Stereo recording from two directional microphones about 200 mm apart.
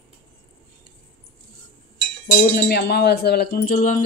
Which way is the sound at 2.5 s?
55° left (ahead or behind).